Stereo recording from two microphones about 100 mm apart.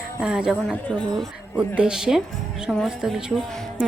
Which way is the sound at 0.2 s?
5° right (ahead or behind).